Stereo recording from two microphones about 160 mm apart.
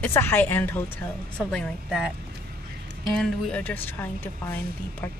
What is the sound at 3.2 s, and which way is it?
Speech, 5° left (ahead or behind).